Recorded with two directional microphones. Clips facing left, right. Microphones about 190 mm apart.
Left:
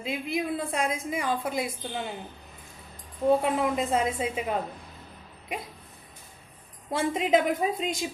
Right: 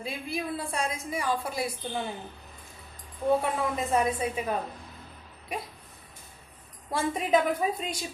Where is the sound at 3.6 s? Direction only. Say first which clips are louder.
Left 1 dB; 20° left (ahead or behind).